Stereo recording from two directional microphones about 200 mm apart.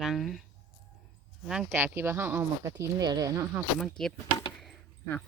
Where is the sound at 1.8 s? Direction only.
10° right (ahead or behind).